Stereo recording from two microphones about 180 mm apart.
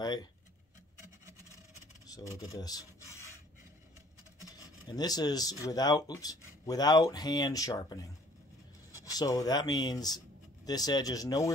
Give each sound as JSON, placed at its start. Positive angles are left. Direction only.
{"t": 0.0, "sound": "a sound", "side_deg": 20}
{"t": 2.0, "sound": "filing", "side_deg": 20}
{"t": 4.5, "sound": "speech", "side_deg": 20}